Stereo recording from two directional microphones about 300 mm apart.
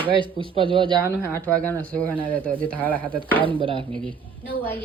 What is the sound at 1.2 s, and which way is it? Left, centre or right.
Speech, centre.